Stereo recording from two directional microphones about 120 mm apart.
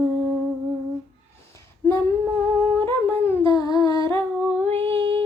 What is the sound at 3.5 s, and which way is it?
Humming, 30° left (ahead or behind).